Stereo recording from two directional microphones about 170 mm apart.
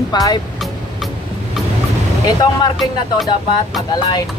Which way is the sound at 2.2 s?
20° left (ahead or behind).